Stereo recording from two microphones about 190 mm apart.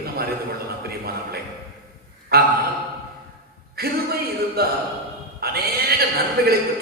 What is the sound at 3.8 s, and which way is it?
A man's voice, 55° right (ahead or behind).